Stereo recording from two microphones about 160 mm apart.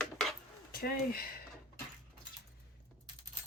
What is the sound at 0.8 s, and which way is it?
Speech, 65° left (ahead or behind).